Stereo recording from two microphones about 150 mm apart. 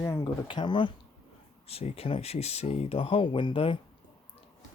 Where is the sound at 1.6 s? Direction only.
40° left (ahead or behind).